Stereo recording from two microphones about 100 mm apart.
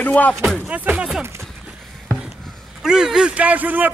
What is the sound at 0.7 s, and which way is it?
Speech, 15° right (ahead or behind).